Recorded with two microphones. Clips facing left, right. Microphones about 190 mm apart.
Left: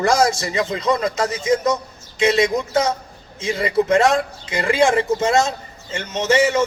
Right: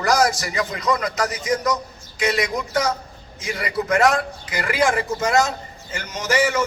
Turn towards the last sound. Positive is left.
turn(degrees=25)  # may be behind; listen again after turning